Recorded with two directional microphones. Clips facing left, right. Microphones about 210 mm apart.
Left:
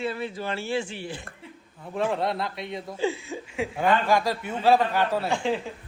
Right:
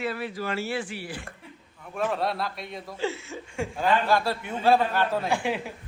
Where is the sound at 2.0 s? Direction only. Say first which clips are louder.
Left 1 dB; 20° left (ahead or behind).